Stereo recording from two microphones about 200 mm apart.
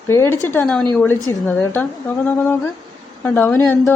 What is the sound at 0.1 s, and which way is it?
A woman's voice, 10° left (ahead or behind).